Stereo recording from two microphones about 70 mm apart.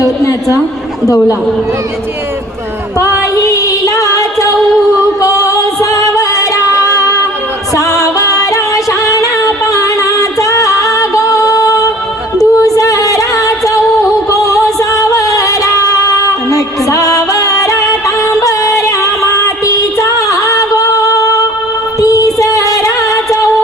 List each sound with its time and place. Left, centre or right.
0.0 s a woman's voice: left
3.0 s music: left
5.2 s singing: left
7.8 s music: left
22.1 s music: left